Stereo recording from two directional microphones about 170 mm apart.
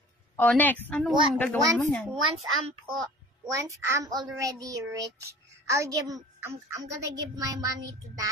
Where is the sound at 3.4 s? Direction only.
20° right (ahead or behind).